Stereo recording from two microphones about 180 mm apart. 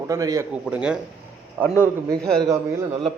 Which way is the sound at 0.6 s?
5° right (ahead or behind).